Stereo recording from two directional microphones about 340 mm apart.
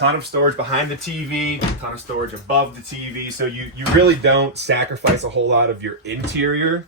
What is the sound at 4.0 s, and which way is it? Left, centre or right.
Speech, right.